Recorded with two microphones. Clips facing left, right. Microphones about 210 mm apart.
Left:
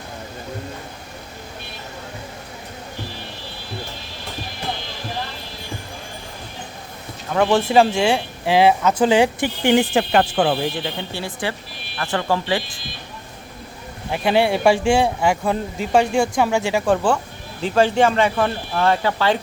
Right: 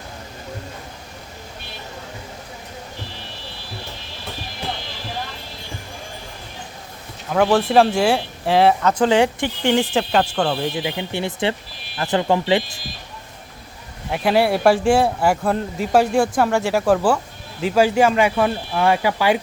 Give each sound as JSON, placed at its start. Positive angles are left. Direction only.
{"t": 7.3, "sound": "speech", "side_deg": -5}
{"t": 9.9, "sound": "speech", "side_deg": 0}
{"t": 10.8, "sound": "speech", "side_deg": -20}
{"t": 14.1, "sound": "speech", "side_deg": 0}